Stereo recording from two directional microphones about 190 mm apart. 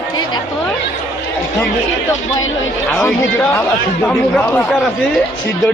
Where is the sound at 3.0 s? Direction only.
10° left (ahead or behind).